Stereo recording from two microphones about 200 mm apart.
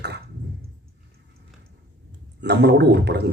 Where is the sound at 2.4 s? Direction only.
60° right (ahead or behind).